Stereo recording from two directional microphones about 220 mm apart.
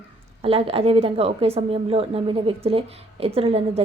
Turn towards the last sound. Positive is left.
turn(degrees=-25)  # may be behind; listen again after turning